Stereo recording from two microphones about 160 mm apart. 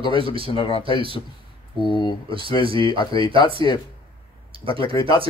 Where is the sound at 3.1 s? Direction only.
25° left (ahead or behind).